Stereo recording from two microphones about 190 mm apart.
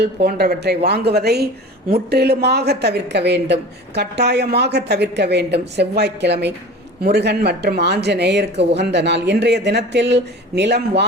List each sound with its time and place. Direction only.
0.0 s speech: 60° right (ahead or behind)